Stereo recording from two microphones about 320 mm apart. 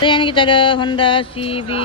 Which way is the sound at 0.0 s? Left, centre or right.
Centre.